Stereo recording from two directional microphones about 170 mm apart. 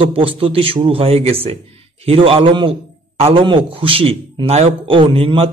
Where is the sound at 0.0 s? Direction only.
30° right (ahead or behind).